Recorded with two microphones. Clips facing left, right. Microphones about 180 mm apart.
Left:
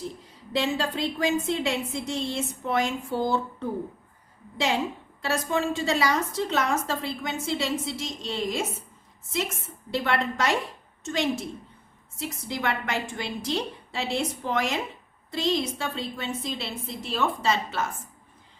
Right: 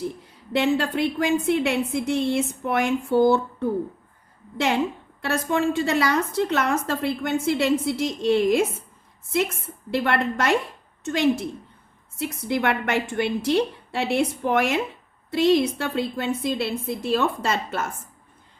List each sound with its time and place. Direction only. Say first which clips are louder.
0.5 s a woman's voice: right 5 dB; 60° right (ahead or behind)
5.2 s a woman's voice: right 4 dB; 60° right (ahead or behind)
9.9 s a woman's voice: right 4 dB; 55° right (ahead or behind)